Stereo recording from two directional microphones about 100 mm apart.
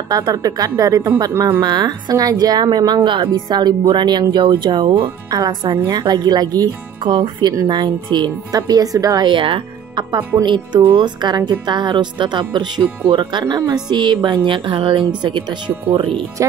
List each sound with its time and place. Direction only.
0.1 s a woman's voice: 40° right (ahead or behind)
9.3 s a woman's voice: 55° right (ahead or behind)